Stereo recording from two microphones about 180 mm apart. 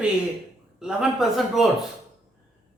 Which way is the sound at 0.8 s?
5° right (ahead or behind).